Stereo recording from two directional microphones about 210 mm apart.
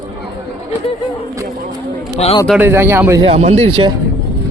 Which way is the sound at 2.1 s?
30° left (ahead or behind).